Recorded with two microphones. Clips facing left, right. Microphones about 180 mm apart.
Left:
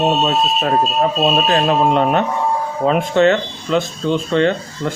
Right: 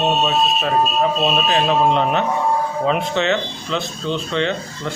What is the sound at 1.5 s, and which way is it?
Speech, 50° left (ahead or behind).